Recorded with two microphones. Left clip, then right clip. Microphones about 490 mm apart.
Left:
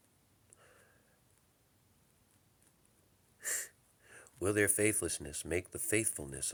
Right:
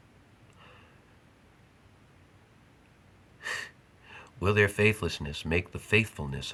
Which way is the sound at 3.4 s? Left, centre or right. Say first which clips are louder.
Right 7 dB; left.